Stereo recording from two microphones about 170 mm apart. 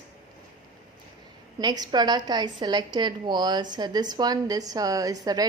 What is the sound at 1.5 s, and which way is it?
A woman's voice, 25° right (ahead or behind).